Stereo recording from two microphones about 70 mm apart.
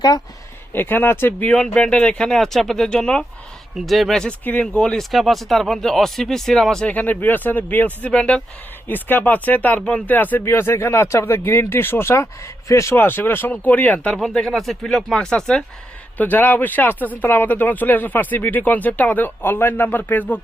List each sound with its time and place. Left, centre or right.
0.7 s speech: left
1.5 s speech: centre
3.8 s speech: centre
4.9 s speech: centre
6.9 s speech: left
8.9 s speech: left
10.4 s speech: left
13.0 s speech: left
14.2 s speech: centre
16.1 s speech: left